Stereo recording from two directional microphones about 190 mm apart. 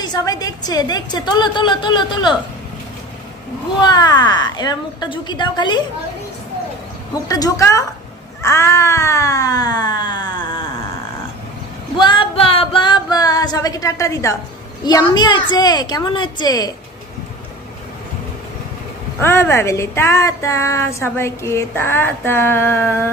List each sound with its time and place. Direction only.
0.0 s a woman's voice: 20° left (ahead or behind)
3.8 s a woman's voice: 20° left (ahead or behind)
7.2 s speech: 20° left (ahead or behind)
8.4 s cat: 15° left (ahead or behind)
12.0 s a sound: 25° left (ahead or behind)
14.9 s a woman's voice: 20° left (ahead or behind)
19.1 s speech: 15° left (ahead or behind)